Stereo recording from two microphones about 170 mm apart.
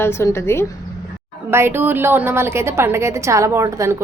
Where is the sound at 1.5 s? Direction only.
15° right (ahead or behind).